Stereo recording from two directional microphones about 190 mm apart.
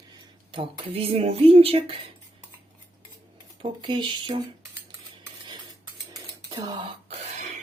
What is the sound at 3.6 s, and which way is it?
Speech, 25° right (ahead or behind).